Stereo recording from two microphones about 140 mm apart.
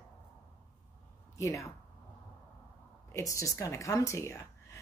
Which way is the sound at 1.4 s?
20° left (ahead or behind).